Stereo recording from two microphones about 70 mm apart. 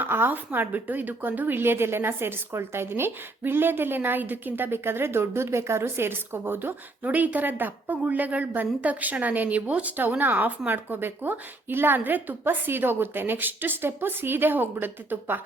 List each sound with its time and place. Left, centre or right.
0.0 s a woman's voice: right